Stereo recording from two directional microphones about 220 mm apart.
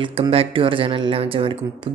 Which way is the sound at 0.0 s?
25° right (ahead or behind).